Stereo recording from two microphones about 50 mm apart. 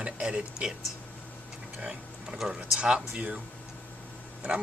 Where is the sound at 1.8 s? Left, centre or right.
Centre.